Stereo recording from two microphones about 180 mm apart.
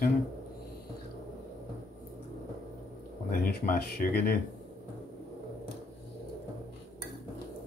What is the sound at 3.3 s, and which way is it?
Speech, 55° left (ahead or behind).